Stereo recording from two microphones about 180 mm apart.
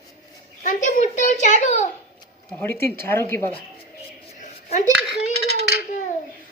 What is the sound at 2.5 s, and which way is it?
Speech, 10° left (ahead or behind).